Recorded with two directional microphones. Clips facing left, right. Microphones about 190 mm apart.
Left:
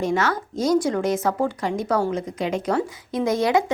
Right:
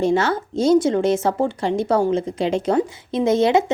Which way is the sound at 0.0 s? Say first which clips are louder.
Right 4 dB; 30° right (ahead or behind).